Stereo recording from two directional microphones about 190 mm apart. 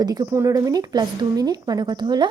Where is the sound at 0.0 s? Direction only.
20° right (ahead or behind).